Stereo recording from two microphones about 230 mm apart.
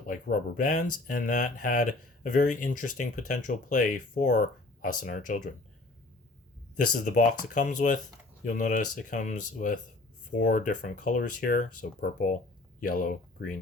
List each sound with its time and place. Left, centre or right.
0.1 s speech: left
6.9 s speech: left